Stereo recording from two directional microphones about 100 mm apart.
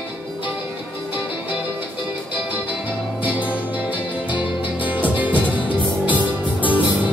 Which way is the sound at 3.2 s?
15° right (ahead or behind).